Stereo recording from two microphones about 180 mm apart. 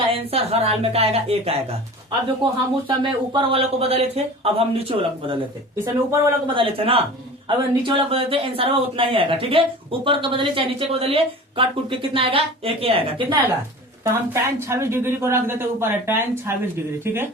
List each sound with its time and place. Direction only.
0.1 s speech: 35° right (ahead or behind)
6.5 s speech: 30° right (ahead or behind)
14.0 s speech: 15° right (ahead or behind)